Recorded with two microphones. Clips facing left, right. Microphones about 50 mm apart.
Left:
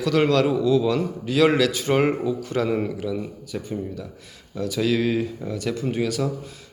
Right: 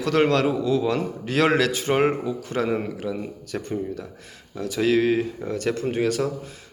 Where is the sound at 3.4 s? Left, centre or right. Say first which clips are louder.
Right 1 dB; right.